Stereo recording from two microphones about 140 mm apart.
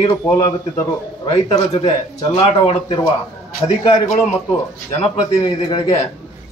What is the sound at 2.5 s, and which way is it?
Speech, 40° left (ahead or behind).